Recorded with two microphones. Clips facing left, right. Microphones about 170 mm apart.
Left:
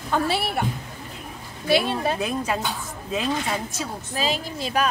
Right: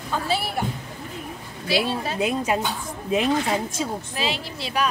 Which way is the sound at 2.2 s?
15° right (ahead or behind).